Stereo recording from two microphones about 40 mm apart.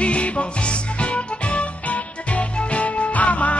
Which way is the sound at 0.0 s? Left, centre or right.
Left.